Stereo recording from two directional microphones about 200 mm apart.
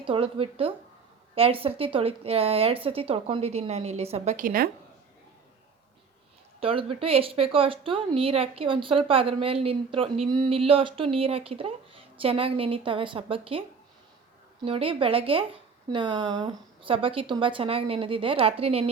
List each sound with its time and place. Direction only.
0.0 s a woman's voice: 25° right (ahead or behind); by 4.7 s 45° right (ahead or behind)
6.6 s speech: 25° right (ahead or behind)